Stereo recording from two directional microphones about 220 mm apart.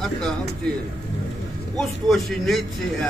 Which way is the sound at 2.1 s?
Centre (ahead or behind).